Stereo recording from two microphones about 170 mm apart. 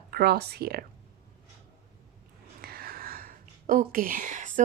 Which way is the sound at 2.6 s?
65° right (ahead or behind).